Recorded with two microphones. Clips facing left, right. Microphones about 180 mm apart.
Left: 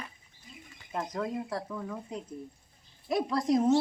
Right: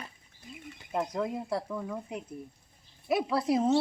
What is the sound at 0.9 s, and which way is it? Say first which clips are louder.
Speech: right 2 dB; 10° right (ahead or behind).